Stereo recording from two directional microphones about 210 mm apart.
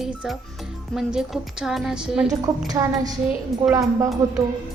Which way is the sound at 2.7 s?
15° right (ahead or behind).